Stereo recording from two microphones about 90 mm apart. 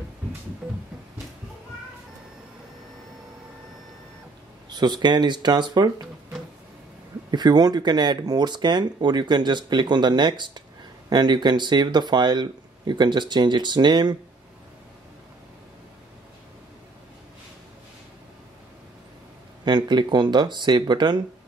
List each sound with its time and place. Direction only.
0.6 s a sound: 5° right (ahead or behind)
4.6 s speech: 55° right (ahead or behind)
7.2 s speech: 50° right (ahead or behind)
19.6 s speech: 55° right (ahead or behind)